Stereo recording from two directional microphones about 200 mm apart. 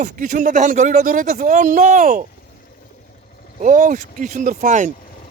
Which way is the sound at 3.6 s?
40° right (ahead or behind).